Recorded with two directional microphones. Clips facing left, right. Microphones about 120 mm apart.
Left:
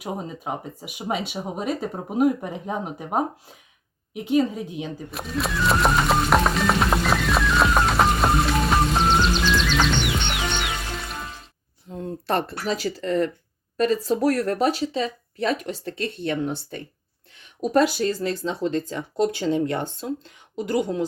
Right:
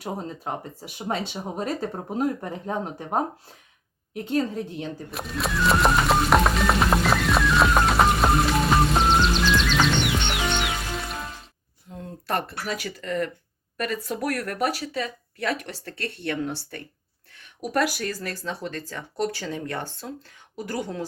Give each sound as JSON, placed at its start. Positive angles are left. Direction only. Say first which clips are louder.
{"t": 0.0, "sound": "speech", "louder": "left 1 dB", "side_deg": 5}
{"t": 4.1, "sound": "music", "louder": "left 4 dB", "side_deg": 10}
{"t": 11.9, "sound": "speech", "louder": "left 4 dB", "side_deg": 25}